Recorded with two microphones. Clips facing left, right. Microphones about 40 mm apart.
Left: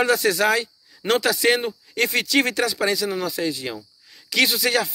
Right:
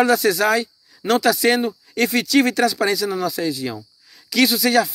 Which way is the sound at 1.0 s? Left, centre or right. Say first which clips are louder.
Right 3 dB; left.